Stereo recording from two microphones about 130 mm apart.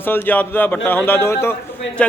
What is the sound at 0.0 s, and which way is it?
Speech, 15° left (ahead or behind).